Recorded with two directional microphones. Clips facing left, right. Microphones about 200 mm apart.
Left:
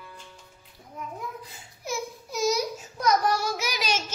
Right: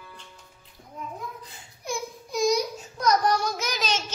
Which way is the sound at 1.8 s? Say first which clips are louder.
Even; 5° left (ahead or behind).